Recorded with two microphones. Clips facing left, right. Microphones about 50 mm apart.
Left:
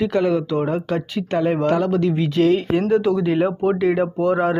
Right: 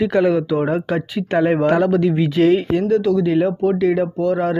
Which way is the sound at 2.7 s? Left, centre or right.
Centre.